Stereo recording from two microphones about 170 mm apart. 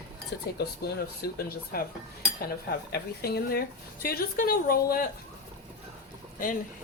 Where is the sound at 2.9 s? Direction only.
65° left (ahead or behind).